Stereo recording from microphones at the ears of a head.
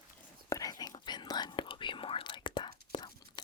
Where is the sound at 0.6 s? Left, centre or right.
Left.